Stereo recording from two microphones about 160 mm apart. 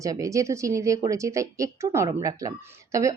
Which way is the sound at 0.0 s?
20° right (ahead or behind).